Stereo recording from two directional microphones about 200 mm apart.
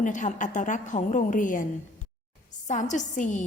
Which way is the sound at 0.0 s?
40° left (ahead or behind).